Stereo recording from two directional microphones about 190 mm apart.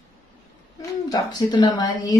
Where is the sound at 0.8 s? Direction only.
20° left (ahead or behind).